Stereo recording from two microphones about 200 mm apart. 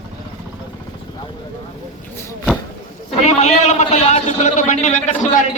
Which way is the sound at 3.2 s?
35° left (ahead or behind).